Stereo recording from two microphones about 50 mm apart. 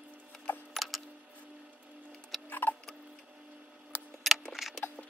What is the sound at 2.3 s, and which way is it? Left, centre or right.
Tick-tock, centre.